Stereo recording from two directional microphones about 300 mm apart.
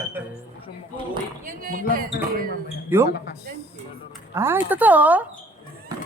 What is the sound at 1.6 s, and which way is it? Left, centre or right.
Speech, right.